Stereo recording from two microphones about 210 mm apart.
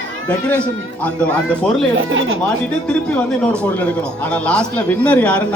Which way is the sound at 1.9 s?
70° right (ahead or behind).